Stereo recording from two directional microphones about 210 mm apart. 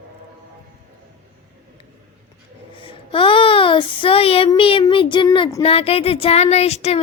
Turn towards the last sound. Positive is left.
turn(degrees=30)  # may be behind; listen again after turning